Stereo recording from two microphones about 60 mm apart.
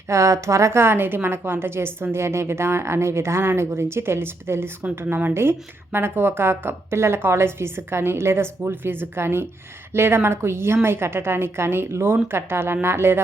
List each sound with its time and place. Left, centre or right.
0.1 s a woman's voice: right